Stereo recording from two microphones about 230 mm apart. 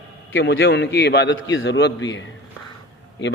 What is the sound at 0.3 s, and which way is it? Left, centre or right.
A man's voice, left.